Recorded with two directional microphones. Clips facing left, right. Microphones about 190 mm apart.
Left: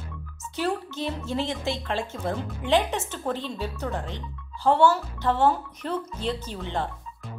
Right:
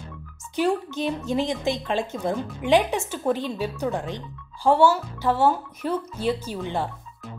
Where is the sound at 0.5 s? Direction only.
15° right (ahead or behind).